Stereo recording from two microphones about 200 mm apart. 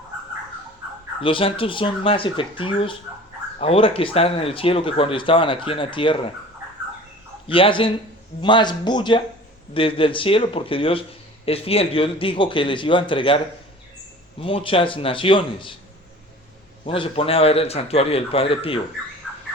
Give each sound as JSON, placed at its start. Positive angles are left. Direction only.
{"t": 1.2, "sound": "speech", "side_deg": 25}
{"t": 7.4, "sound": "speech", "side_deg": 25}
{"t": 16.8, "sound": "speech", "side_deg": 25}
{"t": 19.2, "sound": "bird", "side_deg": 0}